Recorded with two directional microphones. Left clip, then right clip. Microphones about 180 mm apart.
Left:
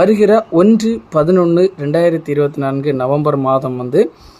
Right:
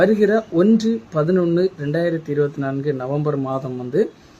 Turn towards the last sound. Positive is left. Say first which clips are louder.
# left 7 dB
turn(degrees=30)  # may be behind; listen again after turning